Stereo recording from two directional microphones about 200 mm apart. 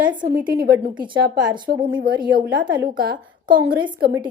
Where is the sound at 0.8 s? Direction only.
25° right (ahead or behind).